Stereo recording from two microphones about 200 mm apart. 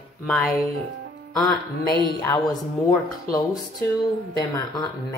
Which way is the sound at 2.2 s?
15° left (ahead or behind).